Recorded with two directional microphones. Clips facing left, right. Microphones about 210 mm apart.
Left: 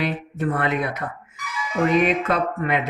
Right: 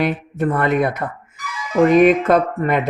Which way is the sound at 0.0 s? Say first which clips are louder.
Right 5 dB; 50° right (ahead or behind).